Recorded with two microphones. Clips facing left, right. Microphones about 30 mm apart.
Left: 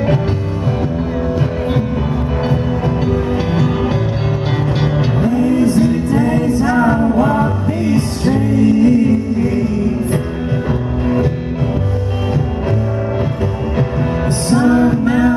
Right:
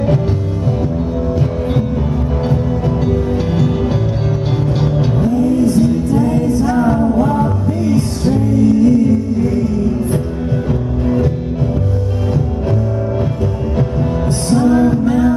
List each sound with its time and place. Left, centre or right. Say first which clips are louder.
3.1 s music: even; left
10.7 s music: even; left
13.7 s music: even; left